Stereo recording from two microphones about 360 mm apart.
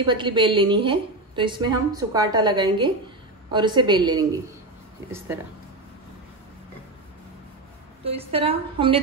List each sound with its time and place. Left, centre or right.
0.0 s a woman's voice: centre
8.0 s a woman's voice: centre